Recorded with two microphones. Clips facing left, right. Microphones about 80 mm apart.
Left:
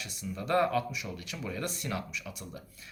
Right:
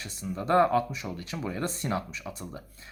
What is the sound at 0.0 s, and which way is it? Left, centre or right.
Speech, right.